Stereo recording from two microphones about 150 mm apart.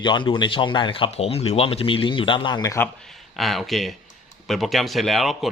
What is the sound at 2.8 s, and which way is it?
Speech, 5° left (ahead or behind).